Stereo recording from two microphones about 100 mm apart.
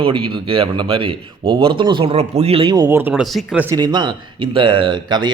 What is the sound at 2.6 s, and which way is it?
Speech, 45° right (ahead or behind).